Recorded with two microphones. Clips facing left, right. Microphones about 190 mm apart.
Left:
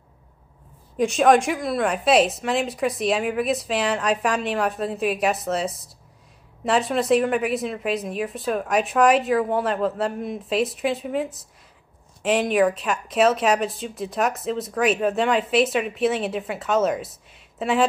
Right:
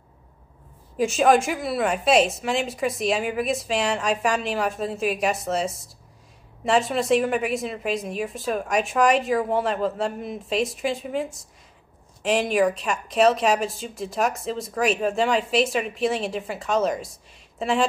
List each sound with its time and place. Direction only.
0.9 s a woman's voice: centre (ahead or behind)